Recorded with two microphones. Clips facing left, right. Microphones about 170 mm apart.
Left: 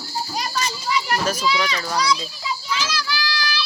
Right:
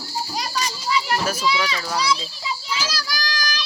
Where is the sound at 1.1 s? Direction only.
10° right (ahead or behind).